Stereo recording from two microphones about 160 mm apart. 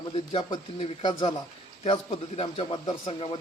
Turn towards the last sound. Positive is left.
turn(degrees=35)  # may be behind; listen again after turning